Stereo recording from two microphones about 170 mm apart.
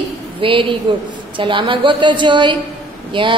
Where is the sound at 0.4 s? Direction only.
30° right (ahead or behind).